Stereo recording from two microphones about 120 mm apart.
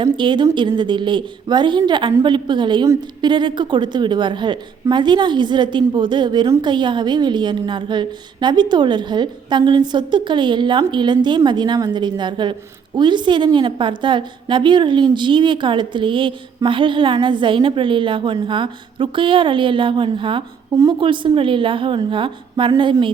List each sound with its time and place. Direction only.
0.0 s a woman's voice: 40° right (ahead or behind)